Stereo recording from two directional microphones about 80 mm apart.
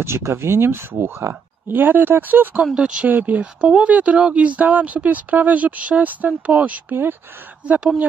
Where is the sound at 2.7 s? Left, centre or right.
Centre.